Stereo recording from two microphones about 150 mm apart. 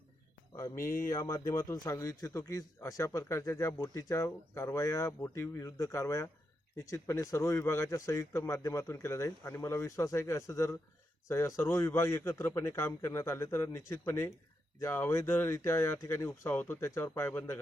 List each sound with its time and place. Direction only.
0.8 s speech: 70° left (ahead or behind)
1.1 s a man's voice: 20° left (ahead or behind)